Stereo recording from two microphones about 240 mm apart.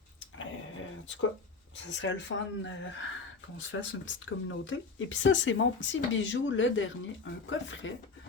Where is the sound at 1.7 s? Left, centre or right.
Left.